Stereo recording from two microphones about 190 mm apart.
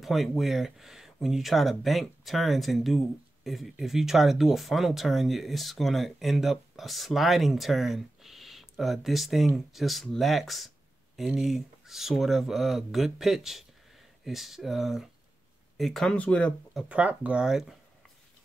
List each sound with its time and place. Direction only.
0.0 s speech: centre (ahead or behind)
16.9 s speech: 5° right (ahead or behind)